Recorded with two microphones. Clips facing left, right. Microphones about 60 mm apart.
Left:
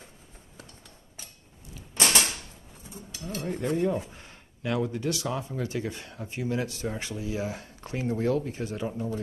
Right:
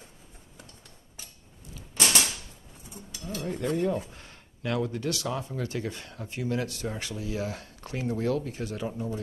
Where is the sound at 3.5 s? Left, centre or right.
Left.